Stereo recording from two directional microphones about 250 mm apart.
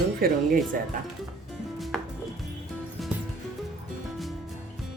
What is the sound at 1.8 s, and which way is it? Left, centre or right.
Music, centre.